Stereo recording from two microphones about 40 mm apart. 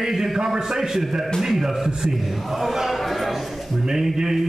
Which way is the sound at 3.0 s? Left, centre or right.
Centre.